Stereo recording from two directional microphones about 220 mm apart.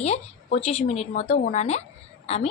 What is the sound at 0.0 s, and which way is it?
A woman's voice, 30° left (ahead or behind).